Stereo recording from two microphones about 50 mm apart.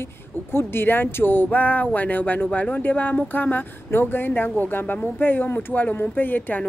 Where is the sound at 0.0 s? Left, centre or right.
Left.